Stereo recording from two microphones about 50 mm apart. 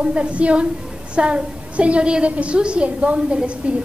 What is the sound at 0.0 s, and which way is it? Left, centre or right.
A woman's voice, right.